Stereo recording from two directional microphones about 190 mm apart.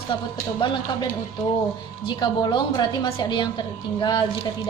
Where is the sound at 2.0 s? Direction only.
25° left (ahead or behind).